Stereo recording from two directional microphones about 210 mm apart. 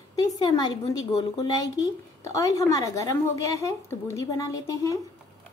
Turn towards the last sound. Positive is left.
turn(degrees=15)  # may be behind; listen again after turning